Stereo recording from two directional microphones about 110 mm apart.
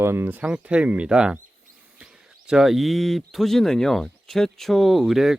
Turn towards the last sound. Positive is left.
turn(degrees=-5)  # may be behind; listen again after turning